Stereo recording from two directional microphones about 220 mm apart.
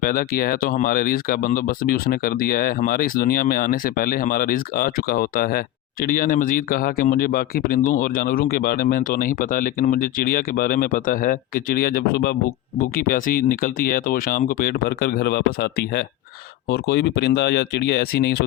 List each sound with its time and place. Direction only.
0.0 s speech: 40° left (ahead or behind)